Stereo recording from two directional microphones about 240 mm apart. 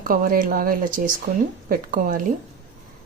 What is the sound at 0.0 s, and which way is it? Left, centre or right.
Speech, right.